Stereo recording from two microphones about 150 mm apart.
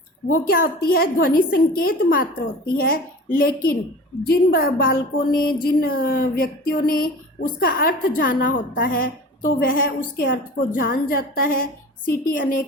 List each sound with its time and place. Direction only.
0.3 s a woman's voice: 80° left